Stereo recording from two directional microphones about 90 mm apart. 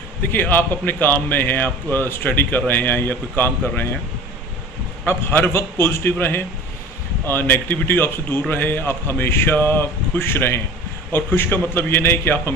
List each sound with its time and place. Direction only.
0.2 s speech: 20° left (ahead or behind)
5.0 s speech: 25° left (ahead or behind)